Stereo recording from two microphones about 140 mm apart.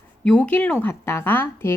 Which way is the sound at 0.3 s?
10° left (ahead or behind).